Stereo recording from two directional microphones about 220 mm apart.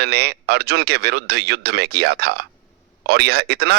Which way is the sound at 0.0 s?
45° right (ahead or behind).